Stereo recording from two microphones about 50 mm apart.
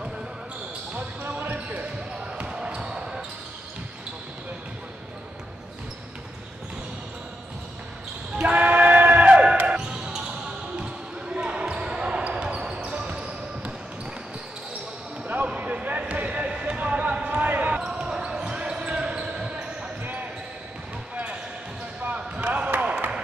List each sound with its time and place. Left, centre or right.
0.9 s basketball bounce: right
2.3 s basketball bounce: centre
8.5 s basketball bounce: right
15.2 s basketball bounce: right
17.7 s basketball bounce: centre
22.0 s basketball bounce: right
22.7 s a sound: right